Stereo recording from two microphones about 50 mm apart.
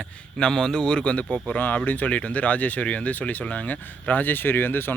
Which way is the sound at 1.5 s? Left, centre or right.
Left.